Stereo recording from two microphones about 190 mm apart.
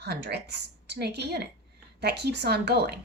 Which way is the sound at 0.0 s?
60° right (ahead or behind).